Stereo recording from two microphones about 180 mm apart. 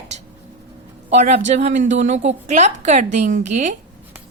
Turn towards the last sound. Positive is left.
turn(degrees=-40)  # may be behind; listen again after turning